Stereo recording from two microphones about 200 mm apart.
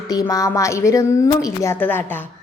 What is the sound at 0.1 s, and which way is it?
A woman's voice, 15° left (ahead or behind).